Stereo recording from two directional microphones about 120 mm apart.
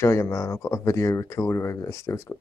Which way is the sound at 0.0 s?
20° left (ahead or behind).